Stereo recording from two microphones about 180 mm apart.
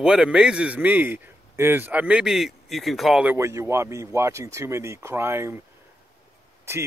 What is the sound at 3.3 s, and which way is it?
Speech, 15° right (ahead or behind).